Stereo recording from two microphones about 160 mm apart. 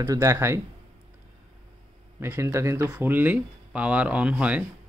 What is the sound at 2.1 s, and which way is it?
Speech, 15° right (ahead or behind).